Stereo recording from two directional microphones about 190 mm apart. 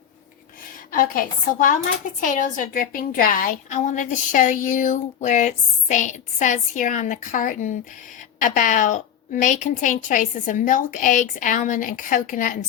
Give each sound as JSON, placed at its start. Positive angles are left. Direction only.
{"t": 0.9, "sound": "a woman's voice", "side_deg": 45}